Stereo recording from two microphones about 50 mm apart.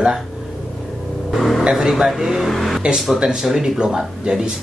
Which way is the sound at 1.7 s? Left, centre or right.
Centre.